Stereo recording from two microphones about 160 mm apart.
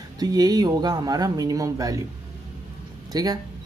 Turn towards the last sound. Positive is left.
turn(degrees=-25)  # may be behind; listen again after turning